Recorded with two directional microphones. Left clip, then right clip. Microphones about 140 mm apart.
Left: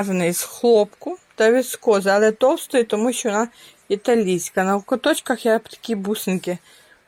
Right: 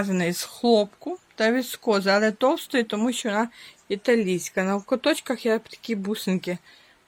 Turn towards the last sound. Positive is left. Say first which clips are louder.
# left 4 dB
turn(degrees=0)  # may be behind; listen again after turning